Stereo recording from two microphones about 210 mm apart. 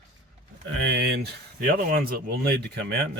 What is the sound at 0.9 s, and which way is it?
Speech, 50° right (ahead or behind).